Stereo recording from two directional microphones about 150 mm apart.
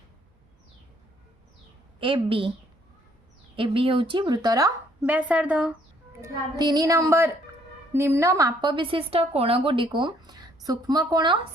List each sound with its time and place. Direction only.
2.0 s a woman's voice: 35° right (ahead or behind)
3.5 s a woman's voice: 35° right (ahead or behind)
5.0 s speech: 10° right (ahead or behind)
6.2 s a woman's voice: 25° right (ahead or behind)